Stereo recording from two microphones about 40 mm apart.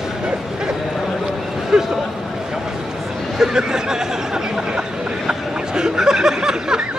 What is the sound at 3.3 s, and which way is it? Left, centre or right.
Speech, centre.